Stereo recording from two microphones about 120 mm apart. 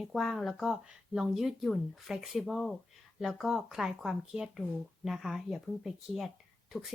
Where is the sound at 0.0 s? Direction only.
Centre (ahead or behind).